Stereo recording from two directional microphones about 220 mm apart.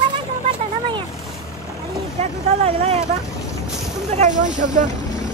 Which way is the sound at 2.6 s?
30° right (ahead or behind).